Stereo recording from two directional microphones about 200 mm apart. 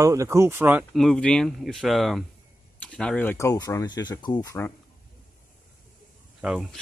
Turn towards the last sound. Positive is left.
turn(degrees=-5)  # may be behind; listen again after turning